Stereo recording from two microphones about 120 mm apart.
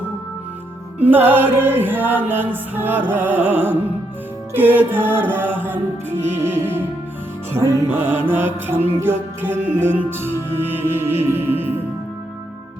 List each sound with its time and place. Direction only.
0.9 s music: 15° right (ahead or behind)